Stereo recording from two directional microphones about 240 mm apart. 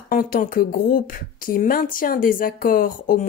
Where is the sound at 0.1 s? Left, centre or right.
Left.